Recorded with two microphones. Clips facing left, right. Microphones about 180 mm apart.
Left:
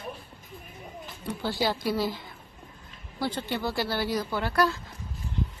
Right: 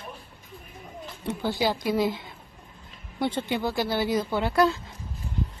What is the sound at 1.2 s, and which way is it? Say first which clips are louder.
Speech: right 2 dB; 20° right (ahead or behind).